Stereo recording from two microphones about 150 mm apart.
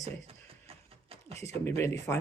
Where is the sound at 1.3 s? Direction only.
45° right (ahead or behind).